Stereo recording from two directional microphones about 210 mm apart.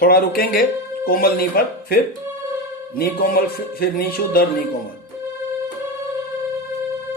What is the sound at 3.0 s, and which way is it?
Music, 45° left (ahead or behind).